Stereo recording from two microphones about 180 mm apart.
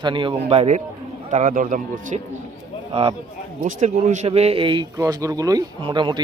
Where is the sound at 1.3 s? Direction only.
45° right (ahead or behind).